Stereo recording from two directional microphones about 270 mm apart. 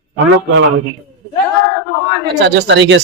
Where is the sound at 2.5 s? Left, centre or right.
Right.